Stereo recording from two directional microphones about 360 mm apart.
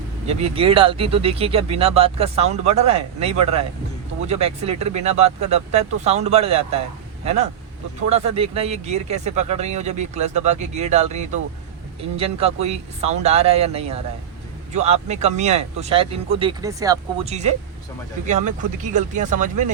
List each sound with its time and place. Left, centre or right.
0.3 s speech: centre
8.1 s speech: centre